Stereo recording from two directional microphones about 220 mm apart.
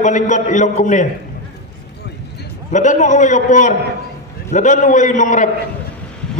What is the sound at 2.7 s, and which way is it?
A man's voice, 35° left (ahead or behind).